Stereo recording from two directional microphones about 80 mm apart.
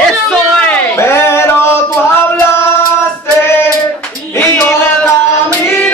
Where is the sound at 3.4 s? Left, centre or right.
Left.